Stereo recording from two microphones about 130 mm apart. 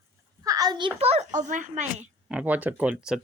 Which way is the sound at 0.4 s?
30° right (ahead or behind).